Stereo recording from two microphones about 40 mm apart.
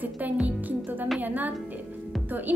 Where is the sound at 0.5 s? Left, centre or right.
Right.